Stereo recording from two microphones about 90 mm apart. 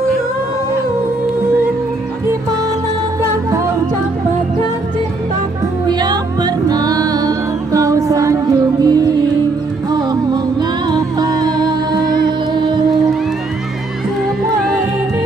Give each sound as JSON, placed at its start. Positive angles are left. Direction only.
{"t": 5.9, "sound": "music", "side_deg": -50}
{"t": 8.8, "sound": "music", "side_deg": -50}